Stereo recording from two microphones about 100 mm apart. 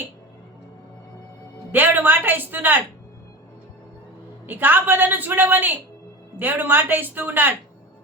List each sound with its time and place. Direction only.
1.7 s a woman's voice: 20° right (ahead or behind)
4.4 s a woman's voice: 20° right (ahead or behind)